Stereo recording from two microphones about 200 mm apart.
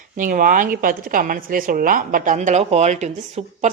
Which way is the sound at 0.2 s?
40° right (ahead or behind).